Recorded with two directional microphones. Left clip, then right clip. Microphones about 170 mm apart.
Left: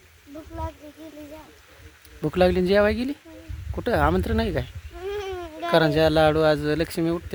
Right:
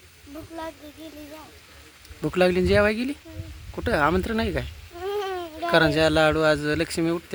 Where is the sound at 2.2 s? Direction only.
15° left (ahead or behind).